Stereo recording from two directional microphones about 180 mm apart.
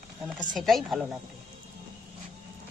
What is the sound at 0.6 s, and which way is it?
Speech, centre (ahead or behind).